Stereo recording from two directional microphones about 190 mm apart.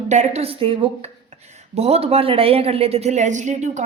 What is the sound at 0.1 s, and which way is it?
A woman's voice, 35° right (ahead or behind).